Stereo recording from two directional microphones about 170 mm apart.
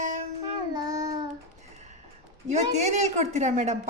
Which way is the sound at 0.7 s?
25° right (ahead or behind).